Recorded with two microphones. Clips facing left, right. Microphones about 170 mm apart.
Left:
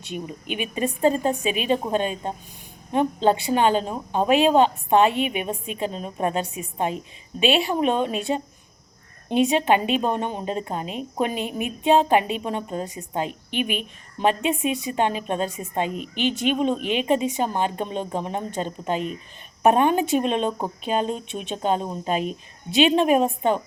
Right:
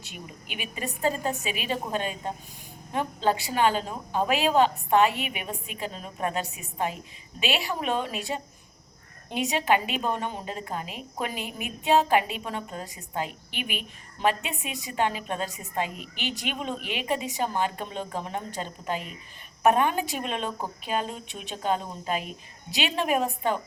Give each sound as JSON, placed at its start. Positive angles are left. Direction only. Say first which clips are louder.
{"t": 0.1, "sound": "a woman's voice", "louder": "left 11 dB", "side_deg": 25}